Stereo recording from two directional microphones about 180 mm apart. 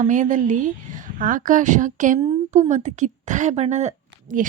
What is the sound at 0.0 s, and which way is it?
A woman's voice, 45° right (ahead or behind).